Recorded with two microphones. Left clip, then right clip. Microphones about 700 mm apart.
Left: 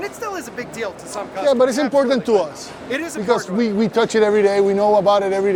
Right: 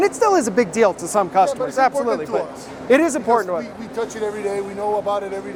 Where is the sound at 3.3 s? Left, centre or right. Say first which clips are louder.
Even; left.